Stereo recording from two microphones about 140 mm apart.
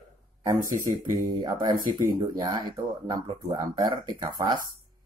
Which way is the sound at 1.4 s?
30° right (ahead or behind).